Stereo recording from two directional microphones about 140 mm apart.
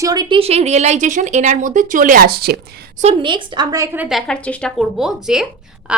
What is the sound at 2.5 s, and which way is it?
Speech, 90° right.